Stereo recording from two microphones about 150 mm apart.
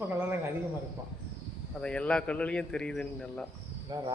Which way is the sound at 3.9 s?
30° right (ahead or behind).